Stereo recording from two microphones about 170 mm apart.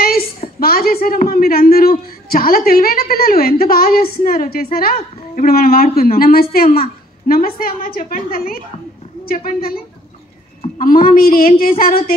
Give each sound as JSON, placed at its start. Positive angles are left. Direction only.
{"t": 0.6, "sound": "a man's voice", "side_deg": 60}